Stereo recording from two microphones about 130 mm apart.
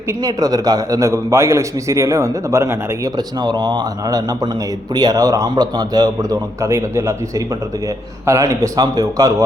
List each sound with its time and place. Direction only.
0.2 s a man's voice: 30° right (ahead or behind)
3.4 s a man's voice: 35° right (ahead or behind)